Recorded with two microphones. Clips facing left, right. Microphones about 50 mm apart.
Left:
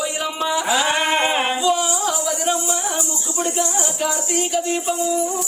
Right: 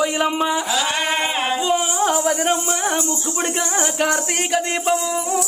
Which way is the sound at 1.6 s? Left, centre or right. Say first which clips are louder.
Even; right.